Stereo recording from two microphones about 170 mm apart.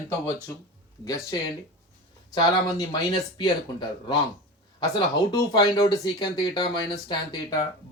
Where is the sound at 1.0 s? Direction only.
20° left (ahead or behind).